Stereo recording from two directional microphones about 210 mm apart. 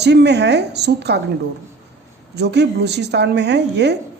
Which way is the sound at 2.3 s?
55° right (ahead or behind).